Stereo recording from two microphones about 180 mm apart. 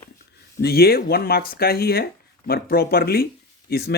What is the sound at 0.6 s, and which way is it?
Speech, 60° left (ahead or behind).